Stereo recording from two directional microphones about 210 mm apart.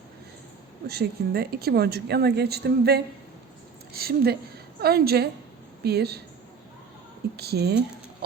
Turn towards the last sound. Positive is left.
turn(degrees=-50)  # may be behind; listen again after turning